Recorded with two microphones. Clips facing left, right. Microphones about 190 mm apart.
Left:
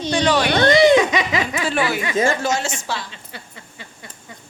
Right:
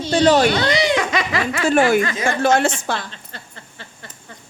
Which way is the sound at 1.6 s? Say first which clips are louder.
Right 11 dB; 45° right (ahead or behind).